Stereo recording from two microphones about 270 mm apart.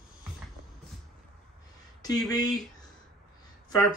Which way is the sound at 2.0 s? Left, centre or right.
Centre.